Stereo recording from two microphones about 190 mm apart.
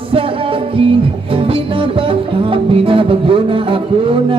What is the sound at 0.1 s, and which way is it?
Music, 30° right (ahead or behind).